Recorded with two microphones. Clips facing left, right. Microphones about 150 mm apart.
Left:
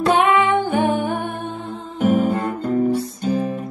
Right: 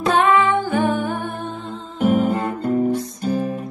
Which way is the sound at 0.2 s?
20° left (ahead or behind).